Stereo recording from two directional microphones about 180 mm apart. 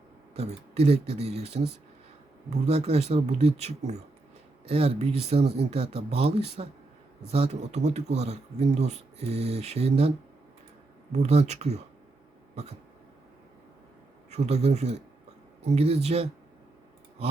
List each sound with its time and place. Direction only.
0.3 s speech: 35° right (ahead or behind)
11.1 s speech: 35° right (ahead or behind)
14.3 s speech: 35° right (ahead or behind)